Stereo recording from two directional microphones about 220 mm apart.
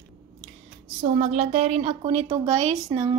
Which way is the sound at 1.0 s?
30° right (ahead or behind).